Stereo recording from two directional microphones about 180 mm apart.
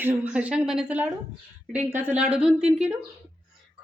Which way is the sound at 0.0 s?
5° right (ahead or behind).